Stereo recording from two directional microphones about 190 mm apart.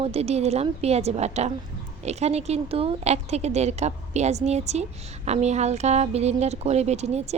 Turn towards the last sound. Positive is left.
turn(degrees=-35)  # may be behind; listen again after turning